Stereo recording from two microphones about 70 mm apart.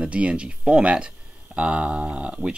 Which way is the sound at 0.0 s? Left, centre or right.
Centre.